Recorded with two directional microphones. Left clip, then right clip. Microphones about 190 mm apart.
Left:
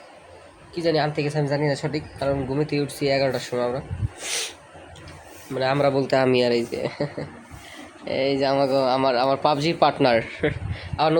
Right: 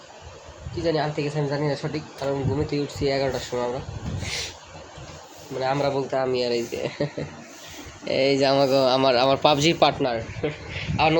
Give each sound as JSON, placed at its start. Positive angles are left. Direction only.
{"t": 0.8, "sound": "speech", "side_deg": 10}
{"t": 4.3, "sound": "vehicle", "side_deg": 25}
{"t": 5.5, "sound": "a man's voice", "side_deg": 20}
{"t": 6.0, "sound": "speech", "side_deg": 60}
{"t": 6.4, "sound": "speech", "side_deg": 40}
{"t": 7.0, "sound": "speech", "side_deg": 10}
{"t": 8.0, "sound": "a man's voice", "side_deg": 0}
{"t": 10.0, "sound": "speech", "side_deg": 50}
{"t": 10.8, "sound": "a sound", "side_deg": 15}